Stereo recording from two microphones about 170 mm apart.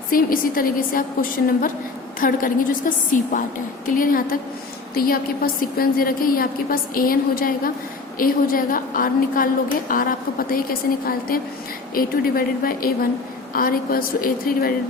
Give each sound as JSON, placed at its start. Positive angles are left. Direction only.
{"t": 0.1, "sound": "a woman's voice", "side_deg": 55}